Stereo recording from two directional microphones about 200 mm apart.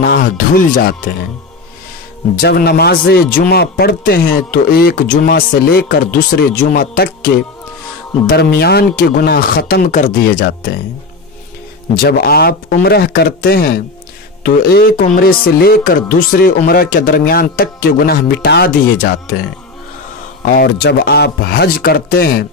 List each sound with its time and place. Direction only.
0.0 s speech: 50° left (ahead or behind)
2.4 s speech: 50° left (ahead or behind)
9.8 s speech: 40° left (ahead or behind)
11.9 s speech: 50° left (ahead or behind)
20.4 s speech: 50° left (ahead or behind)